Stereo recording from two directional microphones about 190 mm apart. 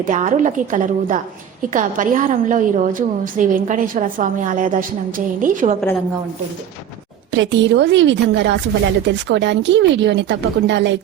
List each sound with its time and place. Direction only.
0.0 s a woman's voice: 40° right (ahead or behind)
7.3 s a woman's voice: 70° right (ahead or behind)